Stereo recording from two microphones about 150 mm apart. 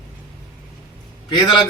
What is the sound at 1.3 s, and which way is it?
Speech, 30° left (ahead or behind).